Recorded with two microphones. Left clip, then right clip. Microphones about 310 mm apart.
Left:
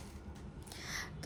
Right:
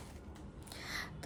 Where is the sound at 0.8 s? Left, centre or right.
Centre.